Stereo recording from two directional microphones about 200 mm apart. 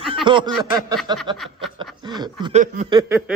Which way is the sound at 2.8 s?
20° right (ahead or behind).